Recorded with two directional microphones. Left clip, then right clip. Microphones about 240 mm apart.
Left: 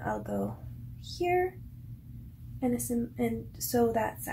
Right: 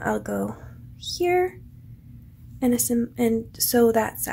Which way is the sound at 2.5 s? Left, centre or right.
Right.